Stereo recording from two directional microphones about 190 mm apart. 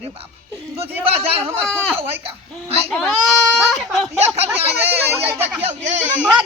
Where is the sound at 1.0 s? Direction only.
30° right (ahead or behind).